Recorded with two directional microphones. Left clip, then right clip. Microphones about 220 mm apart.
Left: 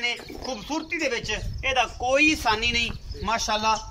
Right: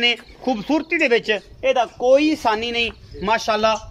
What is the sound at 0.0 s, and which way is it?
Speech, 40° right (ahead or behind).